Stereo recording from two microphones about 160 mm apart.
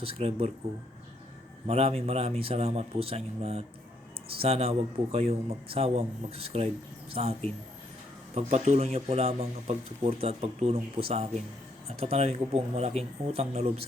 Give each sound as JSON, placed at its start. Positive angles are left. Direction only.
{"t": 0.0, "sound": "speech", "side_deg": -40}
{"t": 1.6, "sound": "speech", "side_deg": -40}
{"t": 8.4, "sound": "speech", "side_deg": -40}